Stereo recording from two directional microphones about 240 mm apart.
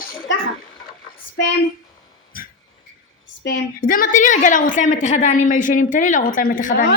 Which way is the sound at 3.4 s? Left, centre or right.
Left.